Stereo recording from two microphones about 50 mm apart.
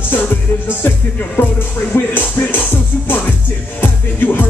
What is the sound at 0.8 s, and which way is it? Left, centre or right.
Music, left.